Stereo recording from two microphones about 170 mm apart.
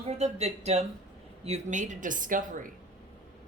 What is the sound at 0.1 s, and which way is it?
A woman's voice, 40° right (ahead or behind).